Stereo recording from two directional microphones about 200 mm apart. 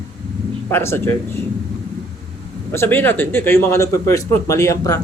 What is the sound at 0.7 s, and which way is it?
Speech, 10° left (ahead or behind).